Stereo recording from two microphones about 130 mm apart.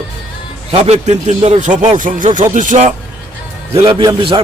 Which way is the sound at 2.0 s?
90° right.